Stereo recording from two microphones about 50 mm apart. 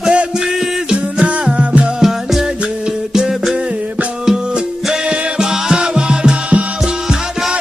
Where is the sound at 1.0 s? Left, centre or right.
Right.